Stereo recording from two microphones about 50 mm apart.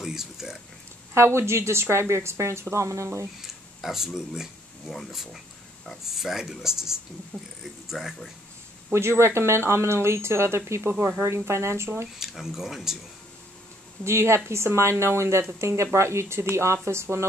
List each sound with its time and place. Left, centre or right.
0.0 s a sound: centre
1.1 s speech: right
2.7 s speech: right
3.3 s a sound: centre
4.9 s speech: centre
8.9 s speech: right
11.2 s speech: right
12.2 s speech: centre
14.0 s speech: right